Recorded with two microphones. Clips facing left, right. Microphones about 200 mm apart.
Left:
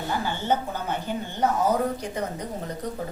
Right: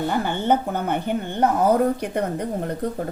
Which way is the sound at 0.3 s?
60° right (ahead or behind).